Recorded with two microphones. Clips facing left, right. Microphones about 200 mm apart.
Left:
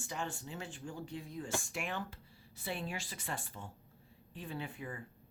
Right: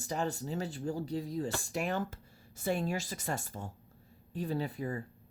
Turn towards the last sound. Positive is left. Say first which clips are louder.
# right 8 dB
turn(degrees=-40)  # may be behind; listen again after turning